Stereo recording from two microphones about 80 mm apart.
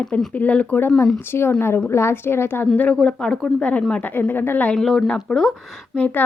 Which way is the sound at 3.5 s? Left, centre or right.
Centre.